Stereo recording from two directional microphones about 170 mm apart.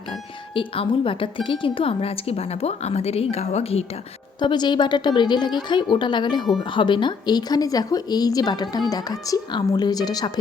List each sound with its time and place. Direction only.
0.5 s speech: 30° left (ahead or behind)
4.4 s a woman's voice: 25° left (ahead or behind)